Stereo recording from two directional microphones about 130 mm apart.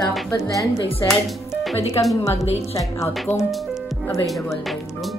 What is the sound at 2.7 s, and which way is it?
Speech, 20° left (ahead or behind).